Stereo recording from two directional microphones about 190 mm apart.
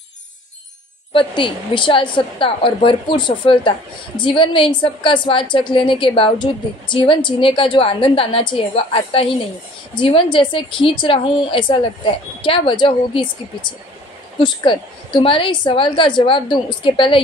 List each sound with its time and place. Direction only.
1.1 s a woman's voice: 25° left (ahead or behind)